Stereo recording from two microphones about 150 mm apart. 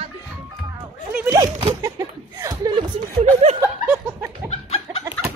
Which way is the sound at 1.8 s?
20° right (ahead or behind).